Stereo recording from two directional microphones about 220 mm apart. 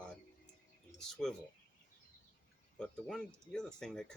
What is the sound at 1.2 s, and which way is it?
Speech, centre (ahead or behind).